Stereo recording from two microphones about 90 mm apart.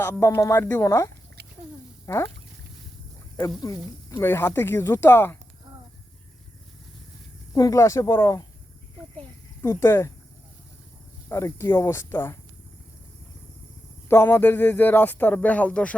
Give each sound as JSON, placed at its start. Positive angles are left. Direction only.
{"t": 0.1, "sound": "speech", "side_deg": 35}
{"t": 0.6, "sound": "speech", "side_deg": 25}
{"t": 4.1, "sound": "speech", "side_deg": 25}
{"t": 7.5, "sound": "speech", "side_deg": 35}
{"t": 9.6, "sound": "speech", "side_deg": 30}
{"t": 11.3, "sound": "speech", "side_deg": 30}
{"t": 14.1, "sound": "speech", "side_deg": 25}